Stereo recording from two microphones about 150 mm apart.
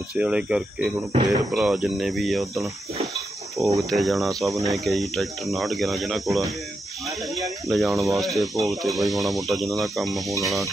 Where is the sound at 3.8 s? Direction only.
Centre (ahead or behind).